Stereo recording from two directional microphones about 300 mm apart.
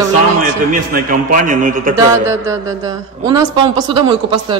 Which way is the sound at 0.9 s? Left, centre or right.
Right.